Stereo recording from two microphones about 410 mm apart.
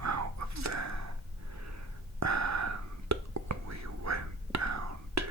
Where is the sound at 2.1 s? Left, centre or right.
Right.